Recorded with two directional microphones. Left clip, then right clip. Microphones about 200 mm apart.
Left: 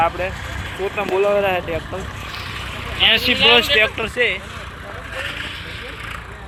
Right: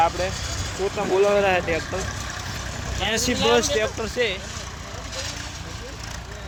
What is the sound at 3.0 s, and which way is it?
Speech, 20° right (ahead or behind).